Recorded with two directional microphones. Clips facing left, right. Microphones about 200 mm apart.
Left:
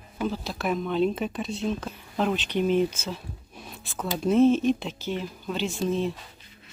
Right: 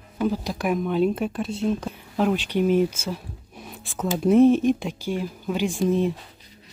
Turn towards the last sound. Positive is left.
turn(degrees=-15)  # may be behind; listen again after turning